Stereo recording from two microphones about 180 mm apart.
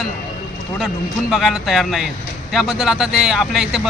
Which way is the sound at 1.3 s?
Centre (ahead or behind).